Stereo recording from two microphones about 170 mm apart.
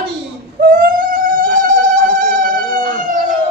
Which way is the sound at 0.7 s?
55° right (ahead or behind).